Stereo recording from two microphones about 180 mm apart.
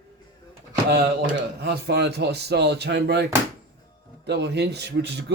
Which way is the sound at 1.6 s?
70° right (ahead or behind).